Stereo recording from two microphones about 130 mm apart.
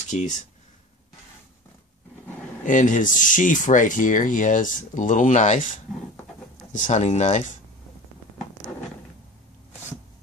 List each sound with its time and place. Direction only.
0.1 s speech: 65° left (ahead or behind)
2.6 s speech: 80° left
6.7 s speech: 65° left (ahead or behind)